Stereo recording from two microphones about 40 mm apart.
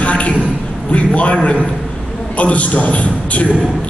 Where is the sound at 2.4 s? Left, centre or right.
Left.